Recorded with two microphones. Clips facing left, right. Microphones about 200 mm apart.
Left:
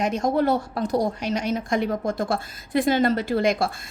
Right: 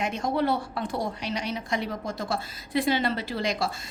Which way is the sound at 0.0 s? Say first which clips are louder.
Left 5 dB; 45° left (ahead or behind).